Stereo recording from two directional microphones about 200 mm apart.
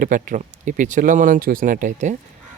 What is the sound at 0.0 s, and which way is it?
Speech, 40° right (ahead or behind).